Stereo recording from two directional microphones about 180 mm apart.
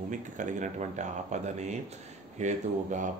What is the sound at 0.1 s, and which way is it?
Speech, 45° right (ahead or behind).